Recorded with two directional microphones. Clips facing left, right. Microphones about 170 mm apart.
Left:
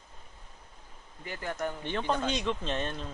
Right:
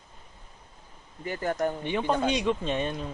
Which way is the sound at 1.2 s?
45° right (ahead or behind).